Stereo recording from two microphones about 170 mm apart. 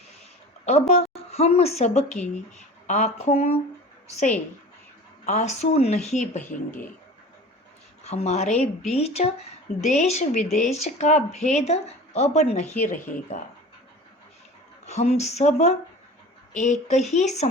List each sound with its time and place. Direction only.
0.6 s a woman's voice: 40° left (ahead or behind)
5.2 s a woman's voice: 40° left (ahead or behind)
8.0 s speech: 40° left (ahead or behind)
13.0 s speech: 10° left (ahead or behind)
14.8 s a woman's voice: 40° left (ahead or behind)